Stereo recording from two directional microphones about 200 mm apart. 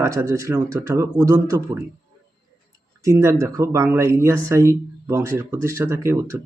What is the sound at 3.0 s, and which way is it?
Speech, 15° right (ahead or behind).